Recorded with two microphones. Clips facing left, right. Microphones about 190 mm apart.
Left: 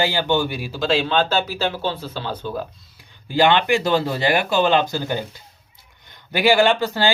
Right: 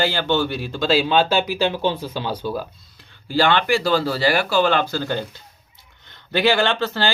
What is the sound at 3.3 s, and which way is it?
Speech, 20° left (ahead or behind).